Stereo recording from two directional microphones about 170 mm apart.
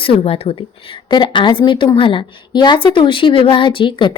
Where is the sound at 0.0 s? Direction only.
35° left (ahead or behind).